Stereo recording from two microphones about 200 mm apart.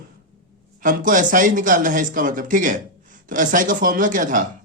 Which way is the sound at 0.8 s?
40° right (ahead or behind).